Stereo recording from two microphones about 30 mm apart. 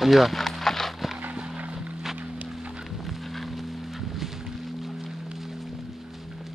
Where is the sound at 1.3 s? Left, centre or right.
Right.